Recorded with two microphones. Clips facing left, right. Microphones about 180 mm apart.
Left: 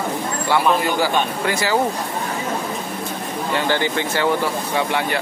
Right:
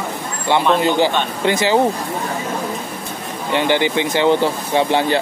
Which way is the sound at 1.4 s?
20° right (ahead or behind).